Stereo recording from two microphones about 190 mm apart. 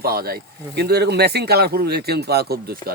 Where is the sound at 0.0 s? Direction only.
55° right (ahead or behind).